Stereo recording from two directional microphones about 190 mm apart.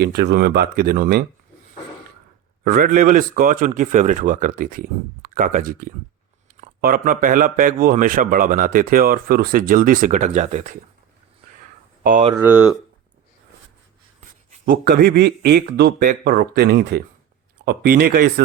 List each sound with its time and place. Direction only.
0.0 s a man's voice: 60° right (ahead or behind)
2.6 s a man's voice: 50° right (ahead or behind)
12.4 s speech: 5° right (ahead or behind)
14.6 s a man's voice: 50° right (ahead or behind)